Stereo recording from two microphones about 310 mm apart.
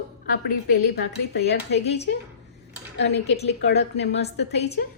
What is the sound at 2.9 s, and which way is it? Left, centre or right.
A woman's voice, left.